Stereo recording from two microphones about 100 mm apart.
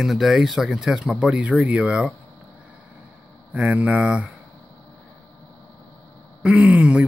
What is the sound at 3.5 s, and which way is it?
Speech, 15° right (ahead or behind).